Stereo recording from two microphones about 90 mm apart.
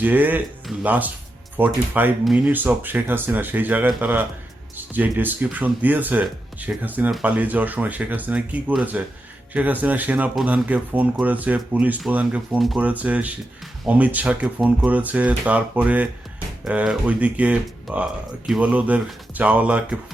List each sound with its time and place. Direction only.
0.0 s speech: 20° right (ahead or behind)
4.9 s speech: 20° right (ahead or behind)
12.5 s speech: centre (ahead or behind)
12.8 s speech: 15° right (ahead or behind)